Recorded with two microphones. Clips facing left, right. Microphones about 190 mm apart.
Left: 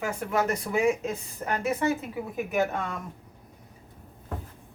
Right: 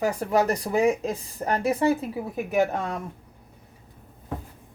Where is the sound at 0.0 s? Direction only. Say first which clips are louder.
Right 5 dB; 35° right (ahead or behind).